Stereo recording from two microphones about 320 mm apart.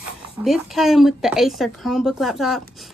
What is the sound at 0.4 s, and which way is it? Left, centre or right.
A woman's voice, centre.